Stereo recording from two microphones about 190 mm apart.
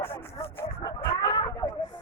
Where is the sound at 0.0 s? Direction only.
10° left (ahead or behind).